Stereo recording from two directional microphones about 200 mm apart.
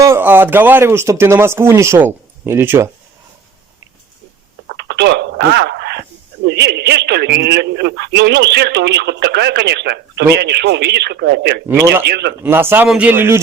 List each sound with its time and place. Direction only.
0.0 s speech: 10° right (ahead or behind)
4.8 s telephone dialing: 55° right (ahead or behind)
6.5 s a man's voice: 55° right (ahead or behind)
11.7 s speech: 10° right (ahead or behind)
12.0 s a man's voice: 55° right (ahead or behind)
12.4 s speech: 10° right (ahead or behind)